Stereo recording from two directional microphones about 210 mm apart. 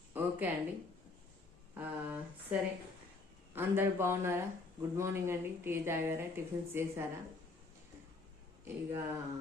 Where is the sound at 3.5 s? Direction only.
10° right (ahead or behind).